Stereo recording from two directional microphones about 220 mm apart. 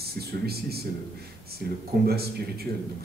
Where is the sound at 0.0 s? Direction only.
45° right (ahead or behind).